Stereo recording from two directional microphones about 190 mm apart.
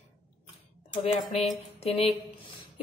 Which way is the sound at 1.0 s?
35° left (ahead or behind).